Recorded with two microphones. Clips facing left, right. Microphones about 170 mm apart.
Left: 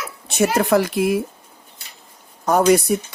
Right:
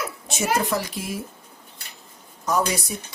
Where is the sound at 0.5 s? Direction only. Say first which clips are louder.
Left 8 dB; 60° left (ahead or behind).